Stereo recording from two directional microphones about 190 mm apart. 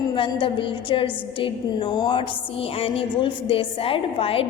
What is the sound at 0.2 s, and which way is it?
A woman's voice, 25° left (ahead or behind).